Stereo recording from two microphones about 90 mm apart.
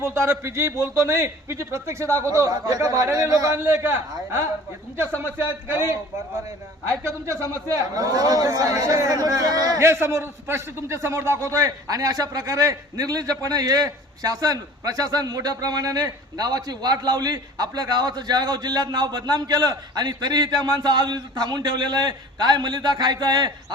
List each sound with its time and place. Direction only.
0.0 s a man's voice: 30° right (ahead or behind)
3.6 s a man's voice: 25° right (ahead or behind)
5.6 s a man's voice: 25° right (ahead or behind)
7.0 s a man's voice: 30° right (ahead or behind)
7.9 s a man's voice: 45° right (ahead or behind)
9.8 s a man's voice: 30° right (ahead or behind); by 23.7 s 50° right (ahead or behind)